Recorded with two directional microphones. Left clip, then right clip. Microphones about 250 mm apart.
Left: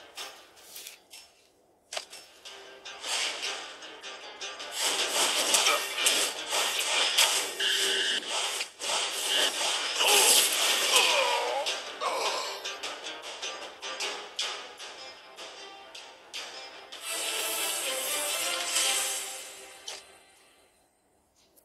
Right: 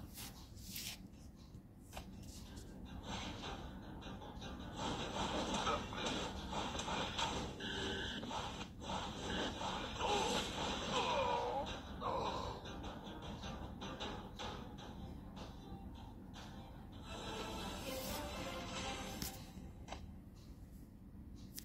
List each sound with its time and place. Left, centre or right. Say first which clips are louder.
2.8 s music: left 17 dB; left
16.5 s music: left 14 dB; left